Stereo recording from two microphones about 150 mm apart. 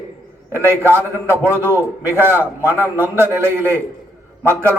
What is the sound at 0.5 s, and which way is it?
A man's voice, 15° right (ahead or behind).